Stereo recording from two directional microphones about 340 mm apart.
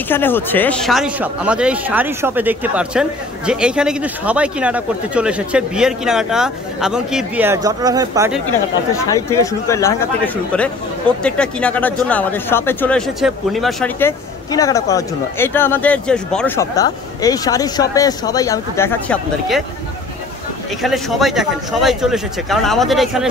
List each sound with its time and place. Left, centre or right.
0.1 s a man's voice: centre
8.9 s speech: centre
20.8 s a man's voice: centre